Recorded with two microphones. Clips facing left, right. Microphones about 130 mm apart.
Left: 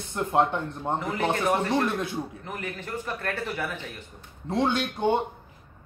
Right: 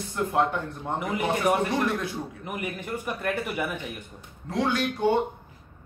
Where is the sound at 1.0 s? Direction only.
15° right (ahead or behind).